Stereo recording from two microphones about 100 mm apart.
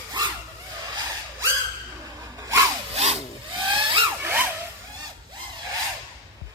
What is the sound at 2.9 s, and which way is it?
Sawing, 90° right.